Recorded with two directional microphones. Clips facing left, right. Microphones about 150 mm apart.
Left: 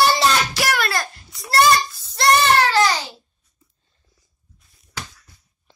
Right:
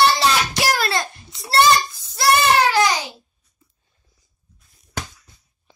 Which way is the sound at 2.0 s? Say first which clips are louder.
Left 1 dB; 10° right (ahead or behind).